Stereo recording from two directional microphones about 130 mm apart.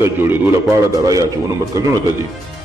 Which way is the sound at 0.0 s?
20° right (ahead or behind).